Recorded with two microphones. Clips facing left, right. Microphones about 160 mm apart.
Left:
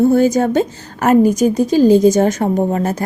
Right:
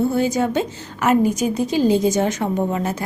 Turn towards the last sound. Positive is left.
turn(degrees=40)  # may be behind; listen again after turning